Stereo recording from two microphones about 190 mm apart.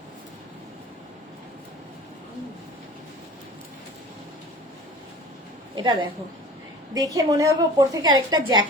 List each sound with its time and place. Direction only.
5.7 s a woman's voice: 25° right (ahead or behind)